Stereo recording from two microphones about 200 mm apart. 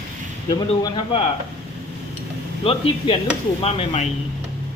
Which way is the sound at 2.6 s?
25° left (ahead or behind).